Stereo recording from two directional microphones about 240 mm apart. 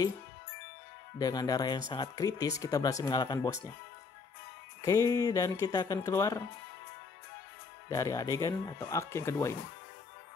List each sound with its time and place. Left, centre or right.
1.1 s speech: centre
4.8 s speech: centre
7.9 s speech: centre